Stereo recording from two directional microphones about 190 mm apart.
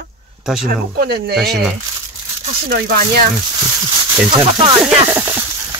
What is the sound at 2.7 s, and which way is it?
Speech, 55° right (ahead or behind).